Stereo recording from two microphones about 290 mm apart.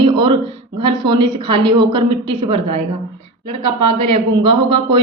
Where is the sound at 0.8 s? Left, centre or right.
Centre.